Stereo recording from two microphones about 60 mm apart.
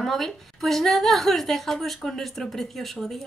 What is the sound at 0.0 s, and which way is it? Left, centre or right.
A woman's voice, centre.